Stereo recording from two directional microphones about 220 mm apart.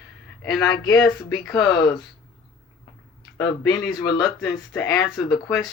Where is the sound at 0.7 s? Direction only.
20° left (ahead or behind).